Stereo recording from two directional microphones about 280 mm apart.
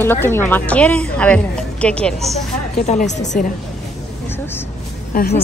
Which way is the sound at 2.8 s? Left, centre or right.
Left.